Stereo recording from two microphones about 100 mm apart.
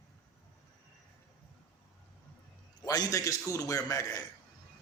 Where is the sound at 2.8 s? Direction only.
40° left (ahead or behind).